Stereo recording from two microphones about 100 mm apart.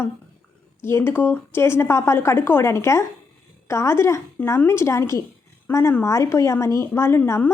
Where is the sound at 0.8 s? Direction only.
25° left (ahead or behind).